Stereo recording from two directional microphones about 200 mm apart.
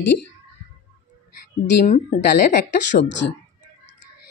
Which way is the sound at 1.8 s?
35° left (ahead or behind).